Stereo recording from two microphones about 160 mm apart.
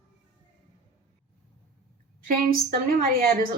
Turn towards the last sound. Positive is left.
turn(degrees=-65)  # may be behind; listen again after turning